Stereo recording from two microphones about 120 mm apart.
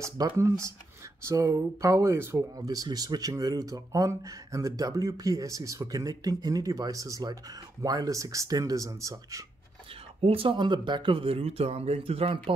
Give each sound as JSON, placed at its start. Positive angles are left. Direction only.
{"t": 0.0, "sound": "speech", "side_deg": -25}
{"t": 10.2, "sound": "speech", "side_deg": -50}